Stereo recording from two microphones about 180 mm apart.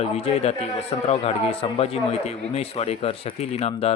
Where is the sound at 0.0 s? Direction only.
30° left (ahead or behind).